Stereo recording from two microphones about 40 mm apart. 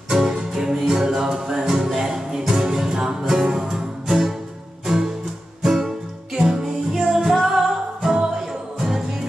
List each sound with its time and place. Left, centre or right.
0.1 s music: centre
8.1 s music: right
8.7 s music: centre